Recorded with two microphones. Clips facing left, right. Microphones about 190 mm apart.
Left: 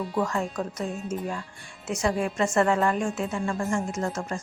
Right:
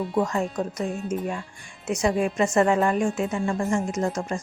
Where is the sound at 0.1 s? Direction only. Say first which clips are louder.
Right 3 dB; 20° right (ahead or behind).